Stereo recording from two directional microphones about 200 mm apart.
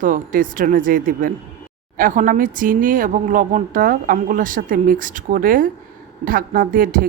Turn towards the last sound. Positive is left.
turn(degrees=-45)  # may be behind; listen again after turning